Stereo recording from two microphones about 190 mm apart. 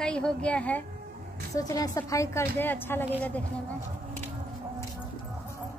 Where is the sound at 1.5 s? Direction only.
15° left (ahead or behind).